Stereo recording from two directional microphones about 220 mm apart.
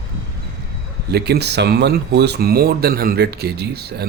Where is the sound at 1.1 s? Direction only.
45° right (ahead or behind).